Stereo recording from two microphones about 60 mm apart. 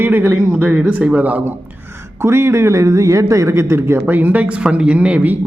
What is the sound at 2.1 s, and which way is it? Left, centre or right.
A man's voice, right.